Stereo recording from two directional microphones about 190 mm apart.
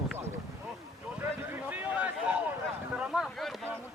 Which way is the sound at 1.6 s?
5° right (ahead or behind).